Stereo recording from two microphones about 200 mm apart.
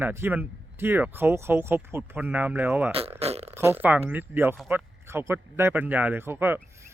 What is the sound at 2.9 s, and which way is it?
Speech, 30° right (ahead or behind).